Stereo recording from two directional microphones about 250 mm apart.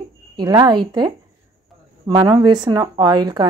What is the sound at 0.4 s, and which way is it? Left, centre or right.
A woman's voice, centre.